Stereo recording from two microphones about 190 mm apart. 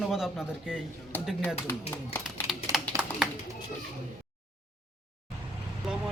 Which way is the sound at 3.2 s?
Centre (ahead or behind).